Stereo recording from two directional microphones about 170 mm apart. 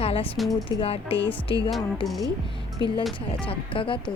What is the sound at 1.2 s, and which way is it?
Speech, 10° left (ahead or behind).